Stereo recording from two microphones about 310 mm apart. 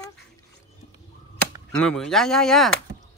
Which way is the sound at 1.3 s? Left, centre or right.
Centre.